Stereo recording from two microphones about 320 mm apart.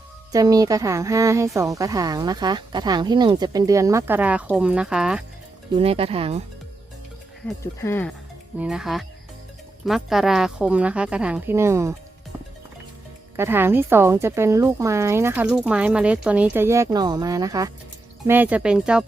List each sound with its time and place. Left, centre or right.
0.3 s speech: centre
5.7 s speech: centre
7.4 s speech: centre
13.3 s speech: centre